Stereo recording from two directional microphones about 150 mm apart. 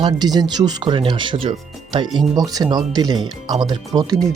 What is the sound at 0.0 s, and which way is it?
Speech, 30° right (ahead or behind).